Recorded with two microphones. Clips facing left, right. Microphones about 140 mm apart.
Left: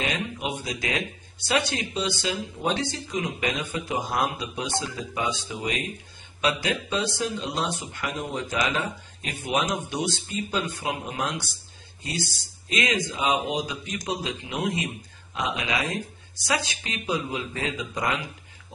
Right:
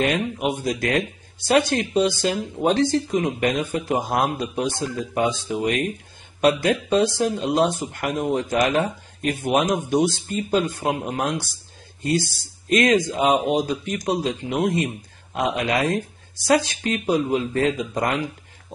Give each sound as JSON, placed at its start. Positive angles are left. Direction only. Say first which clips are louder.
{"t": 0.0, "sound": "speech", "louder": "right 7 dB", "side_deg": -50}